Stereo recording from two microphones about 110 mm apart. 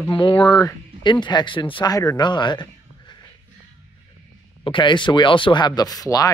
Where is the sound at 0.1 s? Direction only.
50° left (ahead or behind).